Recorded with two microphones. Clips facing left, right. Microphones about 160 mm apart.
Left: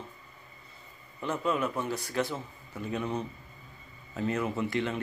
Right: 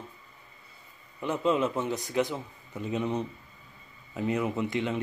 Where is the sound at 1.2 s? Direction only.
20° right (ahead or behind).